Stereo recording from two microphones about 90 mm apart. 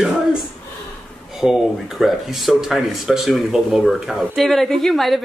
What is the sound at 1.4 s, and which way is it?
Speech, 5° right (ahead or behind).